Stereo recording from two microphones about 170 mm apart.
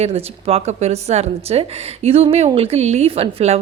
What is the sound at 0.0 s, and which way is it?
A woman's voice, 35° right (ahead or behind).